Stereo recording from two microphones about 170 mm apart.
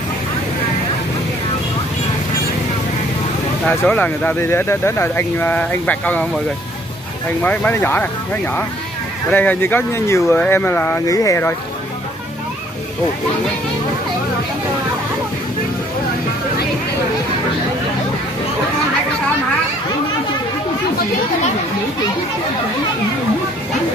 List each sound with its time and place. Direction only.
3.6 s speech: 10° left (ahead or behind)
7.4 s speech: 10° left (ahead or behind)
9.3 s speech: 10° left (ahead or behind)